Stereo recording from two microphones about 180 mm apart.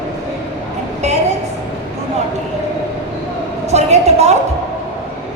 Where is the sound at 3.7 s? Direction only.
40° right (ahead or behind).